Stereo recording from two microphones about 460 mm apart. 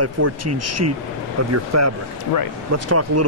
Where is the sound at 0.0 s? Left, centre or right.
Right.